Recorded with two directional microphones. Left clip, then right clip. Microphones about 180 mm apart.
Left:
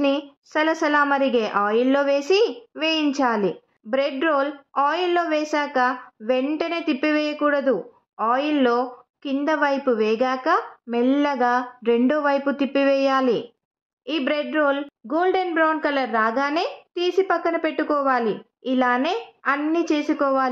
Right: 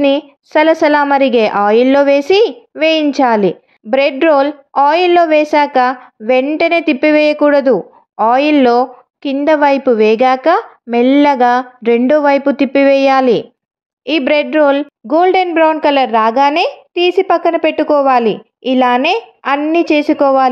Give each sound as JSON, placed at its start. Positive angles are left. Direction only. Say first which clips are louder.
{"t": 0.0, "sound": "a woman's voice", "louder": "right 10 dB", "side_deg": -25}